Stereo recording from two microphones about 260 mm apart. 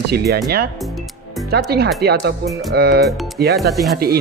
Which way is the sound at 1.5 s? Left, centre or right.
Right.